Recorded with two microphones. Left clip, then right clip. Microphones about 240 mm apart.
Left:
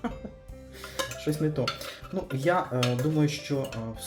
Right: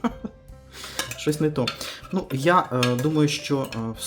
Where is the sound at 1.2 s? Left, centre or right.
Right.